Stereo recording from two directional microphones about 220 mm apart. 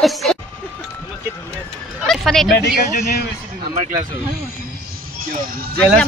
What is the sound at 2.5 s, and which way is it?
Speech, 45° left (ahead or behind).